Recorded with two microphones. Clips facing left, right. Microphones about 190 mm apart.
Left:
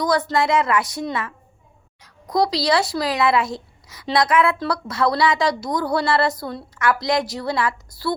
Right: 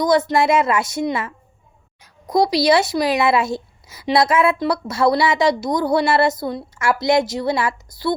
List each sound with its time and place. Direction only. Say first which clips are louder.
0.0 s a woman's voice: right 4 dB; 20° right (ahead or behind)